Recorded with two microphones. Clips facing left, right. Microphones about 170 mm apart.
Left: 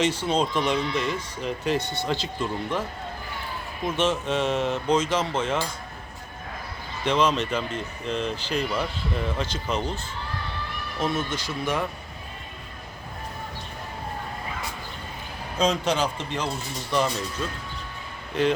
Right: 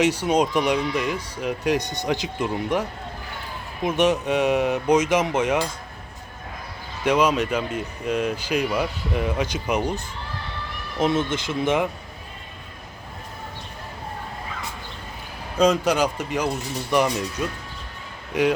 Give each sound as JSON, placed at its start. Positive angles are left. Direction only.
{"t": 0.0, "sound": "speech", "side_deg": -15}
{"t": 3.8, "sound": "speech", "side_deg": -15}
{"t": 7.0, "sound": "speech", "side_deg": -10}
{"t": 11.0, "sound": "speech", "side_deg": -20}
{"t": 15.6, "sound": "speech", "side_deg": -10}